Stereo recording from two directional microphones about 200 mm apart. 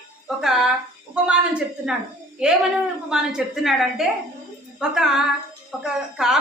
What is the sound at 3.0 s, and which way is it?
A woman's voice, 5° right (ahead or behind).